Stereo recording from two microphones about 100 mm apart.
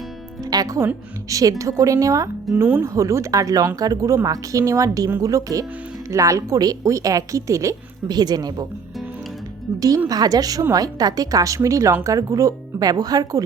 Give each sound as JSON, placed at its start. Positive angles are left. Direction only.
{"t": 0.5, "sound": "music", "side_deg": -40}
{"t": 1.3, "sound": "speech", "side_deg": -35}
{"t": 10.1, "sound": "speech", "side_deg": -40}